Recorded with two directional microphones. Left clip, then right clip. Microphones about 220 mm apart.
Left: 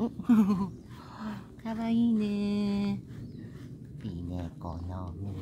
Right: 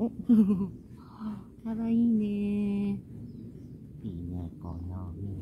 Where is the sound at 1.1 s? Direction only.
25° left (ahead or behind).